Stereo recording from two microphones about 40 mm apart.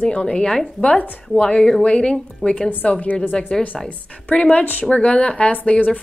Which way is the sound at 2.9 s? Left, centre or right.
Left.